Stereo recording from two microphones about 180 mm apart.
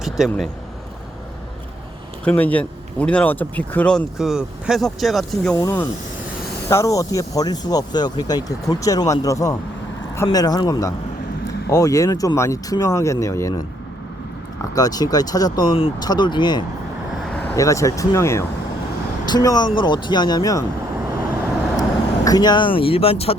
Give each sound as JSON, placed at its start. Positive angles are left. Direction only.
{"t": 0.2, "sound": "speech", "side_deg": 0}
{"t": 2.2, "sound": "speech", "side_deg": 10}
{"t": 5.5, "sound": "speech", "side_deg": 20}
{"t": 14.8, "sound": "speech", "side_deg": 20}
{"t": 17.3, "sound": "speech", "side_deg": 15}
{"t": 21.8, "sound": "speech", "side_deg": 20}